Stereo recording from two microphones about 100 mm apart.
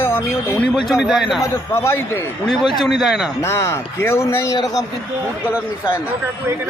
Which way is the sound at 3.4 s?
25° left (ahead or behind).